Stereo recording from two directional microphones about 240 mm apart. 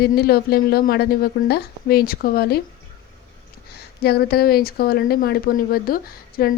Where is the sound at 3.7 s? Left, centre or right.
Left.